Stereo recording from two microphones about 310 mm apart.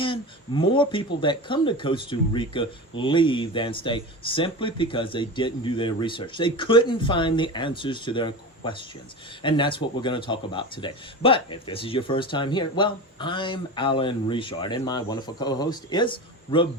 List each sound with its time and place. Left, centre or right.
0.0 s speech: centre